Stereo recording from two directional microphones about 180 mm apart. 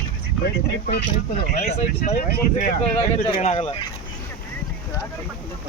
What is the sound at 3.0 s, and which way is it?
Speech, 35° left (ahead or behind).